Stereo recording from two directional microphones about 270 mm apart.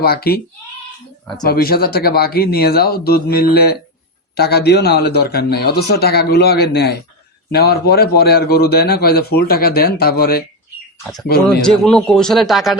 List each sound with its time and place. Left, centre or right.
0.0 s a man's voice: left
1.5 s a man's voice: left
11.6 s a man's voice: centre